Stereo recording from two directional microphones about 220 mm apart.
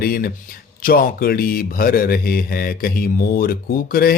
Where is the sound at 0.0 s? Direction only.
40° left (ahead or behind).